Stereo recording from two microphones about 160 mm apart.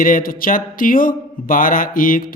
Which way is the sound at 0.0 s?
60° left (ahead or behind).